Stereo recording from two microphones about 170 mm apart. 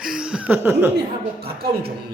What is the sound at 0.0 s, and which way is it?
Chuckle, 5° right (ahead or behind).